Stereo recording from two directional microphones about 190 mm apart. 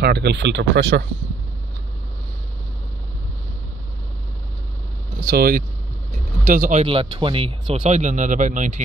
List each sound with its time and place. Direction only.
0.0 s speech: 60° right (ahead or behind)
5.2 s speech: 50° right (ahead or behind)